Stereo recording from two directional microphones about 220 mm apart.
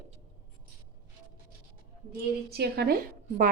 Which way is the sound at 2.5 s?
50° right (ahead or behind).